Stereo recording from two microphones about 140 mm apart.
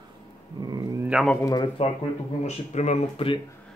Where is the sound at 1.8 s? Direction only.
45° left (ahead or behind).